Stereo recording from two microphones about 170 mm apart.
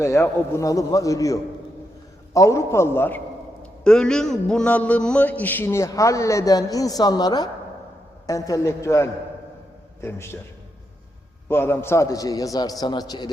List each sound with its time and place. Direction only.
0.0 s a man's voice: 15° left (ahead or behind)
11.4 s a man's voice: 15° left (ahead or behind)